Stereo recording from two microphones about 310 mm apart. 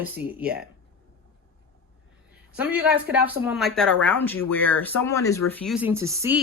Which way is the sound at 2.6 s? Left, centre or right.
Centre.